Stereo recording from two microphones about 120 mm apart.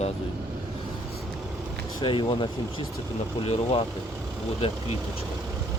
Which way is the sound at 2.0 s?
40° left (ahead or behind).